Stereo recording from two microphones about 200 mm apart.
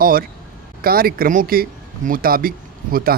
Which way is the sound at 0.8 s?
50° right (ahead or behind).